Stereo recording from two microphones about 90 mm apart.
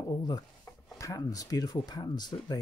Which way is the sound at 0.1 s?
45° left (ahead or behind).